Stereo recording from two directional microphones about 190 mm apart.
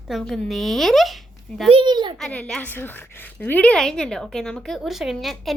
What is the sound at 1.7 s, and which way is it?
Speech, 25° right (ahead or behind).